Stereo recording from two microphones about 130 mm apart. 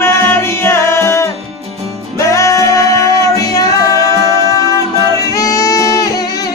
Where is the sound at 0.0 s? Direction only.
20° left (ahead or behind).